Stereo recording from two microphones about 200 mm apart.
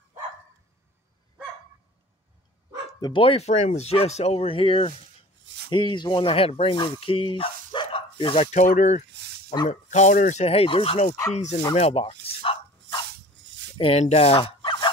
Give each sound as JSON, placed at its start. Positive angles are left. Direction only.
{"t": 2.9, "sound": "speech", "side_deg": 20}
{"t": 11.7, "sound": "bow-wow", "side_deg": 30}
{"t": 13.4, "sound": "a sound", "side_deg": -70}
{"t": 13.7, "sound": "speech", "side_deg": 30}